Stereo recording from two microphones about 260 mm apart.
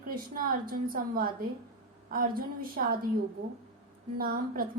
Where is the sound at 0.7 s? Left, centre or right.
Right.